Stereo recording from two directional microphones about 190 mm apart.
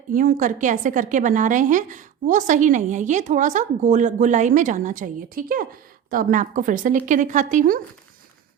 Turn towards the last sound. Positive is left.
turn(degrees=-45)  # may be behind; listen again after turning